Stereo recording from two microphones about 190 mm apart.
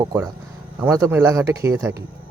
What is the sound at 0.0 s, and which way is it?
Speech, 15° right (ahead or behind).